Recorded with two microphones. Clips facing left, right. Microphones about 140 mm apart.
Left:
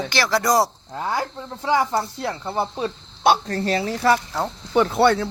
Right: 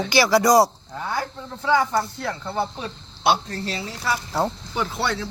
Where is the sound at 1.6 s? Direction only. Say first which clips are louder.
Even; 25° left (ahead or behind).